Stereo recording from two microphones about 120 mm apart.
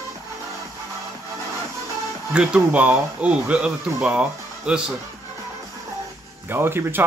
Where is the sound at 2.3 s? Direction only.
10° right (ahead or behind).